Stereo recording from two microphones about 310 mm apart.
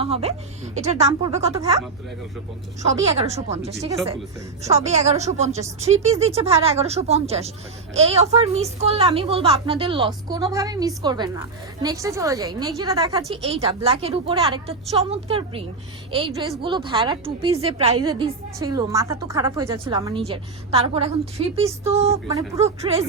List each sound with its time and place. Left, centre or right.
0.0 s speech: centre
3.2 s a woman's voice: right